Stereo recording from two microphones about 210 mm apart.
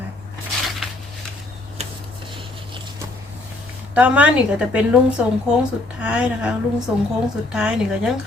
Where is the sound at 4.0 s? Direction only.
5° right (ahead or behind).